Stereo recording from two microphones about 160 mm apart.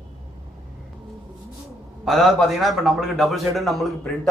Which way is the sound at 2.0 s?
Centre (ahead or behind).